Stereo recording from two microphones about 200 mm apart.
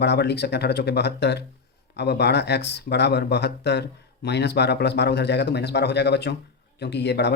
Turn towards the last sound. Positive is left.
turn(degrees=55)  # may be behind; listen again after turning